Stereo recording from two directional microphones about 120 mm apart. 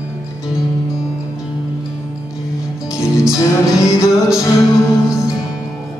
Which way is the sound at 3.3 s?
25° left (ahead or behind).